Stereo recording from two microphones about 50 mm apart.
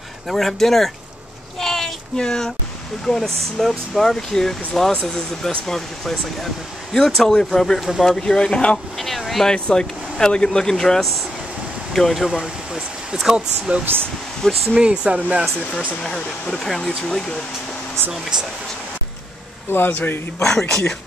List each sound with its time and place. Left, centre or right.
0.3 s speech: centre
1.6 s a sound: centre
3.1 s speech: centre
8.9 s a sound: centre
9.7 s speech: centre
14.4 s speech: centre
14.8 s speech: right
16.0 s speech: centre
16.5 s speech: centre
19.7 s speech: left
20.4 s speech: centre